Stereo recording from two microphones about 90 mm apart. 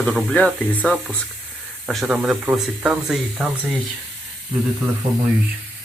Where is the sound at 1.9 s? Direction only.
Centre (ahead or behind).